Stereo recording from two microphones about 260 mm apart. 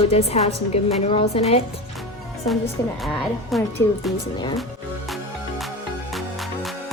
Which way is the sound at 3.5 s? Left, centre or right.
Centre.